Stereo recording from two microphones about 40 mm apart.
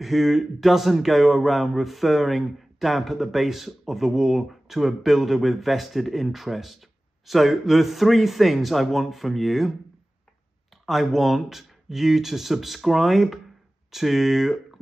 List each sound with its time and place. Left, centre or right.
0.0 s speech: centre
10.9 s speech: centre